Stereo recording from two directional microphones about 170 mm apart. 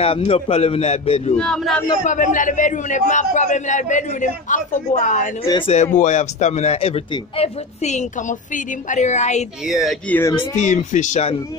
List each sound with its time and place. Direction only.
0.0 s a man's voice: 35° left (ahead or behind)
1.3 s speech: 5° left (ahead or behind)
2.0 s a man's voice: 50° left (ahead or behind)
9.7 s speech: centre (ahead or behind)
10.5 s a man's voice: 45° left (ahead or behind)